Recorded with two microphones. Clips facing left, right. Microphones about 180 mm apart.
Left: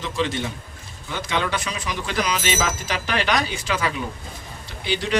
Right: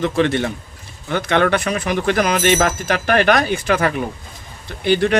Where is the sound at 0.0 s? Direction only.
60° right (ahead or behind).